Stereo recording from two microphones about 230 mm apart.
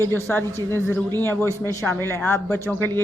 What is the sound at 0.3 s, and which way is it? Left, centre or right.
Speech, centre.